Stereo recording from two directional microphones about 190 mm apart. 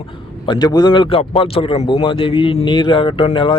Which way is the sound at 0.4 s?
20° left (ahead or behind).